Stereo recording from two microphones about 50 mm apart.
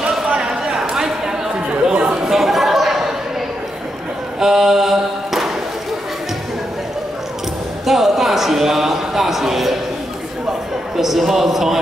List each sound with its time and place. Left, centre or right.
0.0 s a sound: centre
1.7 s chatter: right
2.1 s chatter: centre
4.4 s mantra: centre
7.8 s a sound: centre
11.0 s a man's voice: centre